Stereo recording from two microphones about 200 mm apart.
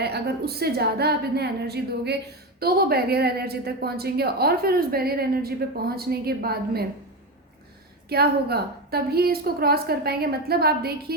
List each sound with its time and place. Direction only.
0.0 s a woman's voice: 55° right (ahead or behind)
8.1 s a woman's voice: 50° right (ahead or behind)